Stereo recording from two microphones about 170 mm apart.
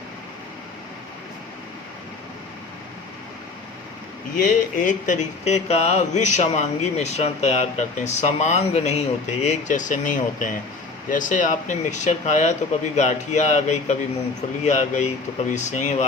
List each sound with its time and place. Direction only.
4.4 s speech: 50° left (ahead or behind)